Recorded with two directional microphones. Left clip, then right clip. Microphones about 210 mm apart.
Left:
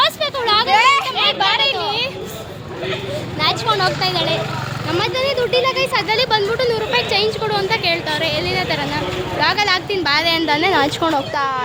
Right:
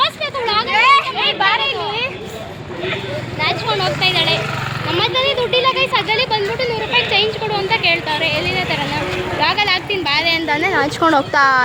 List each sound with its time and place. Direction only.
0.0 s a sound: 25° left (ahead or behind)
0.7 s children playing: 55° left (ahead or behind)
1.2 s a sound: centre (ahead or behind)
3.4 s vehicle: 15° left (ahead or behind)
4.9 s speech: 5° left (ahead or behind)
10.0 s a woman's voice: 30° left (ahead or behind)
10.4 s speech: 10° left (ahead or behind)
11.0 s speech: 10° right (ahead or behind)